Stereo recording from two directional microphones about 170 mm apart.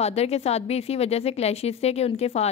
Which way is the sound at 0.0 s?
40° left (ahead or behind).